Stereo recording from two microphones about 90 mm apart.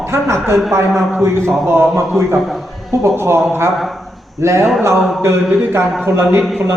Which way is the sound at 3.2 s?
30° right (ahead or behind).